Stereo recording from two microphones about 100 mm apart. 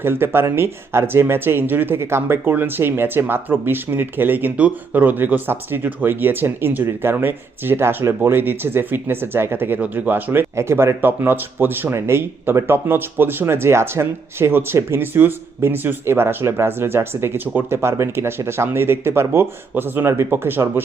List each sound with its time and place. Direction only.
0.0 s speech: 25° right (ahead or behind)